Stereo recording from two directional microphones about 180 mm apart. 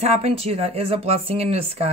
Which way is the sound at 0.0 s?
35° right (ahead or behind).